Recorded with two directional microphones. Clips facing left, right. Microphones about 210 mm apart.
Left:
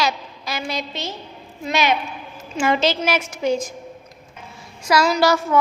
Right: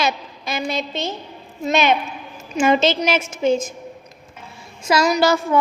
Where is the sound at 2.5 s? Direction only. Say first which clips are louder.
Right 3 dB; 20° right (ahead or behind).